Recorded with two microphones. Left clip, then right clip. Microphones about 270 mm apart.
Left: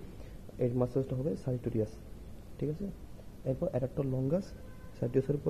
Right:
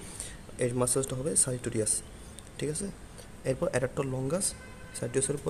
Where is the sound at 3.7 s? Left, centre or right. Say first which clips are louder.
Right 4 dB; centre.